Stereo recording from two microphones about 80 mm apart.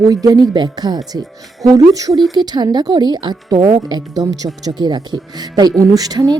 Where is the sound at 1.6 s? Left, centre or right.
Right.